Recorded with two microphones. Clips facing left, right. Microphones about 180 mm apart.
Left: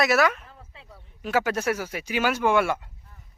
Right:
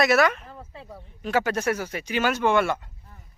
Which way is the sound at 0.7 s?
45° right (ahead or behind).